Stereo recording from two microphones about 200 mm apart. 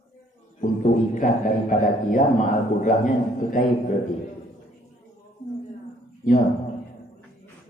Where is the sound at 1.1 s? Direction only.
40° left (ahead or behind).